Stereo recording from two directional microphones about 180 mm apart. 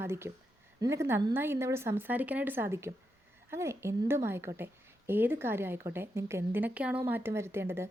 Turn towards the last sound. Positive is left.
turn(degrees=-15)  # may be behind; listen again after turning